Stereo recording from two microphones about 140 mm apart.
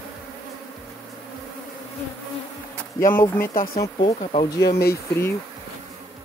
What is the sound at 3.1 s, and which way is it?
Speech, 15° left (ahead or behind).